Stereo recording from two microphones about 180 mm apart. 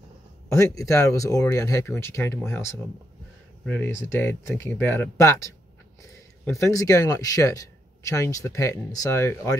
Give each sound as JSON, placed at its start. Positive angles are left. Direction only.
{"t": 0.5, "sound": "speech", "side_deg": 15}